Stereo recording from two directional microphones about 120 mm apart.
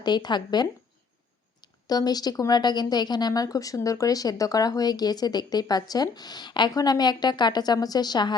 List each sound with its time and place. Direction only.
0.0 s speech: 35° left (ahead or behind)